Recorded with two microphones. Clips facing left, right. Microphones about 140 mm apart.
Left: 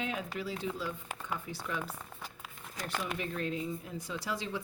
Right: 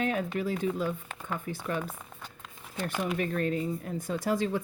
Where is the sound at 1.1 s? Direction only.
10° left (ahead or behind).